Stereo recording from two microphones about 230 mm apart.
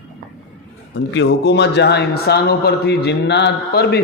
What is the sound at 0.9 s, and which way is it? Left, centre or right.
A man's voice, left.